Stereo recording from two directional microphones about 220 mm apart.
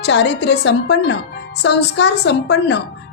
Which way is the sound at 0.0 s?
50° left (ahead or behind).